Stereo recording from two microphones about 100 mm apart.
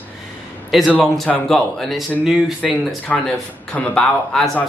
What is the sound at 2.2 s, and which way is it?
Speech, 5° right (ahead or behind).